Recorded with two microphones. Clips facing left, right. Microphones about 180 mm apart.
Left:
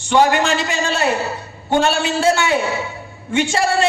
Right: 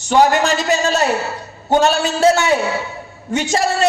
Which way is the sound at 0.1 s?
40° right (ahead or behind).